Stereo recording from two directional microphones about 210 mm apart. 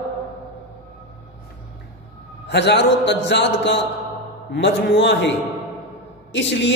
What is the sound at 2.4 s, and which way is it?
A man's voice, 55° left (ahead or behind).